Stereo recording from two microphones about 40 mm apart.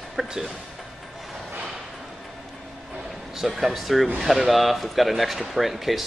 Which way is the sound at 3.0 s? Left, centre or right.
Centre.